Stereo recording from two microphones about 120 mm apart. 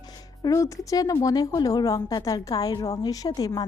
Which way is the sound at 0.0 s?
35° left (ahead or behind).